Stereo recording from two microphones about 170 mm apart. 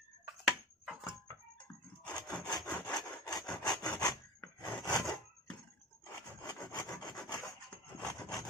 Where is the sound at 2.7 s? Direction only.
5° left (ahead or behind).